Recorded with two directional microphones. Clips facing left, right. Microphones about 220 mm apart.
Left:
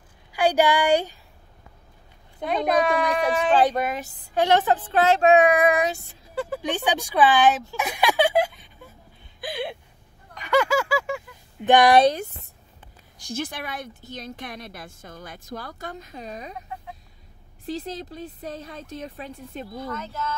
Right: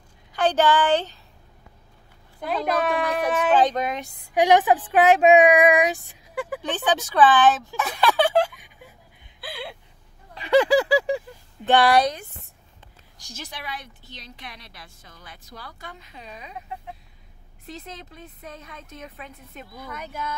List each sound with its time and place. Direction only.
0.3 s speech: 10° left (ahead or behind)
2.4 s speech: centre (ahead or behind)
4.3 s speech: 15° right (ahead or behind)
6.6 s speech: 10° left (ahead or behind)
8.5 s a sound: 15° right (ahead or behind)
9.4 s a sound: 20° left (ahead or behind)
10.3 s a sound: 30° right (ahead or behind)
11.6 s speech: 15° left (ahead or behind)
13.2 s a woman's voice: 55° left (ahead or behind)
17.6 s a woman's voice: 35° left (ahead or behind)
19.9 s speech: 15° right (ahead or behind)